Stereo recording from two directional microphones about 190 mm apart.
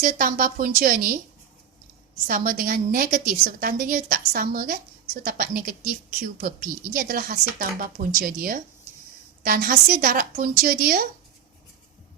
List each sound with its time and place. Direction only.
0.0 s a woman's voice: 45° right (ahead or behind)
2.2 s a woman's voice: 50° right (ahead or behind)